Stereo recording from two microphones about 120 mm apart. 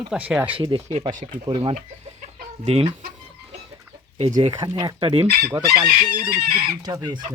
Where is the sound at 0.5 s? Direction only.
45° right (ahead or behind).